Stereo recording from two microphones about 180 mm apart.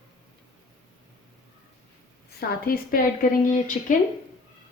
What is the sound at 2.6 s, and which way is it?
Speech, 55° left (ahead or behind).